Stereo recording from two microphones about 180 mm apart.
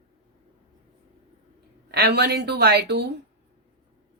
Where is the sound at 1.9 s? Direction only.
65° right (ahead or behind).